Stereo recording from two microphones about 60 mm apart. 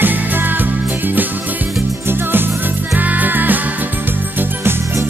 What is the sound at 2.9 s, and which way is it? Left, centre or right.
Music, right.